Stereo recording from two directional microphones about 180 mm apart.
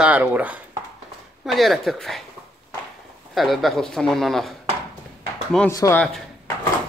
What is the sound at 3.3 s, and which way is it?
Speech, centre (ahead or behind).